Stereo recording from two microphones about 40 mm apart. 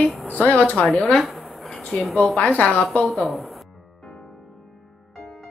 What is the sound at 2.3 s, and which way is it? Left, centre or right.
Speech, left.